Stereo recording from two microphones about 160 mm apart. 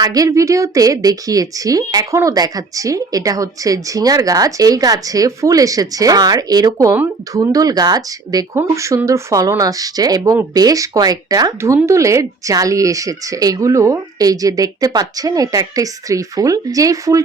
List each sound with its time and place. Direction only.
0.0 s a woman's voice: 20° right (ahead or behind)